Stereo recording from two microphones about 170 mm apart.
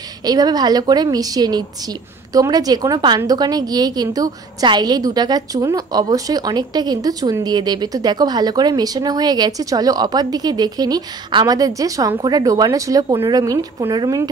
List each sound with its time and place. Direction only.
0.2 s a woman's voice: 20° right (ahead or behind)